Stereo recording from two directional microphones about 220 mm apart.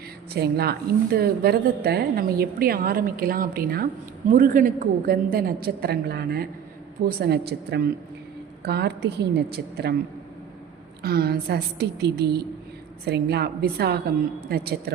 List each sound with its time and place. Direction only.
0.3 s a woman's voice: 45° right (ahead or behind)
11.0 s a woman's voice: 45° right (ahead or behind)